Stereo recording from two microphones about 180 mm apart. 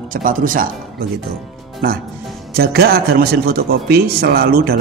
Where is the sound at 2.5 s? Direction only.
60° right (ahead or behind).